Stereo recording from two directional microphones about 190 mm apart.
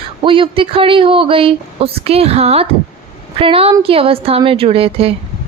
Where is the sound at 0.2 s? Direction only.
25° right (ahead or behind).